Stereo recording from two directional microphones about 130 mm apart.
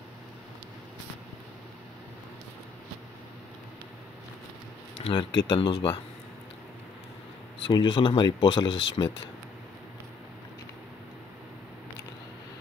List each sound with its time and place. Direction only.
5.0 s speech: 35° left (ahead or behind)
7.6 s speech: 35° left (ahead or behind)